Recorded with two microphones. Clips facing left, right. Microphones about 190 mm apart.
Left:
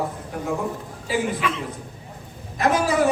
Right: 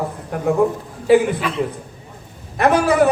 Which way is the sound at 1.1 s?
60° right (ahead or behind).